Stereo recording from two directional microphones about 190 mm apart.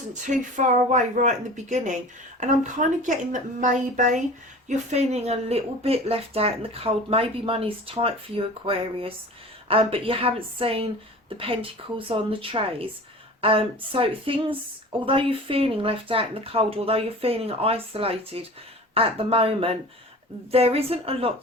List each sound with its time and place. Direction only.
0.5 s speech: 40° right (ahead or behind)